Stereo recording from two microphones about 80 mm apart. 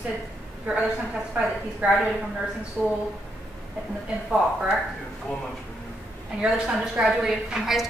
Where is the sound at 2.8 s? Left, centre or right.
Centre.